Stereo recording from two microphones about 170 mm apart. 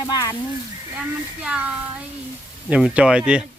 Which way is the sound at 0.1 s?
20° left (ahead or behind).